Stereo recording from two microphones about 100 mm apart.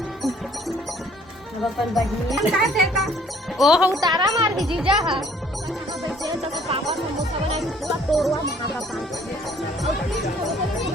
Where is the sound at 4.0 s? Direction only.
40° right (ahead or behind).